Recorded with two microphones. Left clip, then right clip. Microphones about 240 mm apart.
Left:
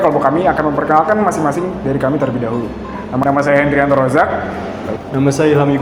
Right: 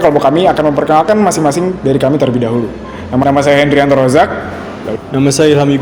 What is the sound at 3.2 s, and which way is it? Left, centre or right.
A man's voice, right.